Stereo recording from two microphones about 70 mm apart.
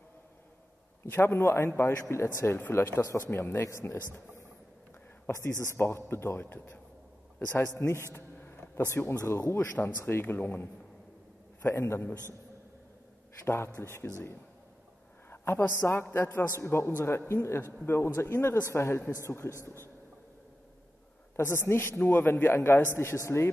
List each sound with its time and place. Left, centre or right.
1.0 s a man's voice: left
5.3 s a man's voice: left
9.2 s speech: left
9.7 s a man's voice: left
13.7 s a man's voice: left
15.2 s a man's voice: left
21.4 s a man's voice: left